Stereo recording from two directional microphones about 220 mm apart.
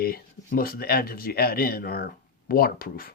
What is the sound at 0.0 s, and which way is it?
Speech, 45° left (ahead or behind).